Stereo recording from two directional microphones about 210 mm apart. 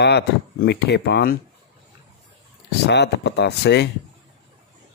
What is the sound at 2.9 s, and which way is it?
Speech, 55° left (ahead or behind).